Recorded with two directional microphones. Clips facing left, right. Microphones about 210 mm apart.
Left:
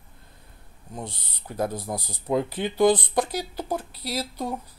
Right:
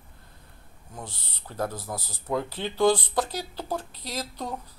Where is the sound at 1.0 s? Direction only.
20° left (ahead or behind).